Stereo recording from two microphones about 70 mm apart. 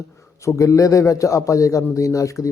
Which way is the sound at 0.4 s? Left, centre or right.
Left.